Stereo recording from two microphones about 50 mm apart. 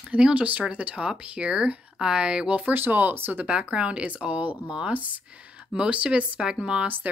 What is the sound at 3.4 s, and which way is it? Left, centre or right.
Speech, right.